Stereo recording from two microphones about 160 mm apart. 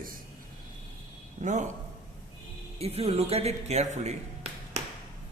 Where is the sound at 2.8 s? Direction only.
40° right (ahead or behind).